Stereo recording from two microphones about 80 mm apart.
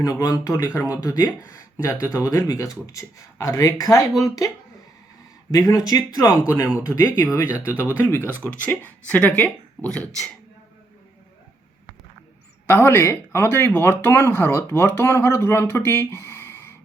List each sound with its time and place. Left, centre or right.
0.0 s speech: left
0.6 s speech: left
0.9 s speech: left
1.8 s speech: left
6.7 s speech: left; by 10.3 s centre
12.6 s speech: left